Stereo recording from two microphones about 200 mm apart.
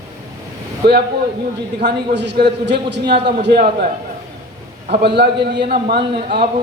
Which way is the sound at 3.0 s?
25° right (ahead or behind).